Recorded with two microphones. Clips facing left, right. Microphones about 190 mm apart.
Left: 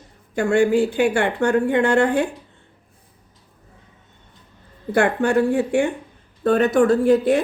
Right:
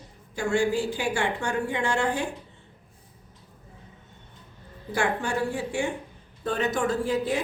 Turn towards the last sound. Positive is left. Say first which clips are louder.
# left 10 dB
turn(degrees=60)  # may be behind; listen again after turning